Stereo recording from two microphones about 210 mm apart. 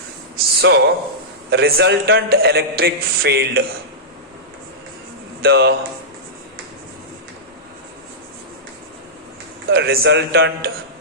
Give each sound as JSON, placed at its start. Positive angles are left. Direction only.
{"t": 0.3, "sound": "a sound", "side_deg": -50}
{"t": 1.5, "sound": "a man's voice", "side_deg": -50}
{"t": 5.4, "sound": "a man's voice", "side_deg": -50}
{"t": 9.7, "sound": "a man's voice", "side_deg": -45}